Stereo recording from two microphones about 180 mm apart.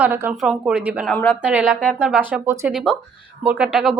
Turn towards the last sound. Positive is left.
turn(degrees=-5)  # may be behind; listen again after turning